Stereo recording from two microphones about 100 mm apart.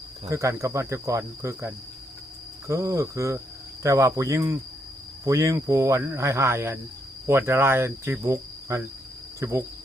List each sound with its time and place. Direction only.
0.3 s cricket: 30° right (ahead or behind)
2.6 s speech: 30° right (ahead or behind)
7.3 s cricket: 25° right (ahead or behind)